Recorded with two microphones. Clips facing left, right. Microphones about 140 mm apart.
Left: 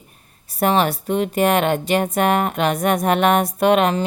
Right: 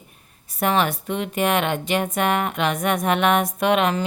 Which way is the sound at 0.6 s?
35° left (ahead or behind).